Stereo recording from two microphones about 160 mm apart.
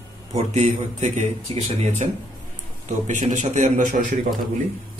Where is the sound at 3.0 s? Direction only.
50° right (ahead or behind).